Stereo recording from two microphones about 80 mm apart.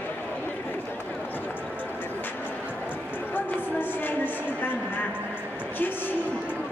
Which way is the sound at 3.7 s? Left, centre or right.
Left.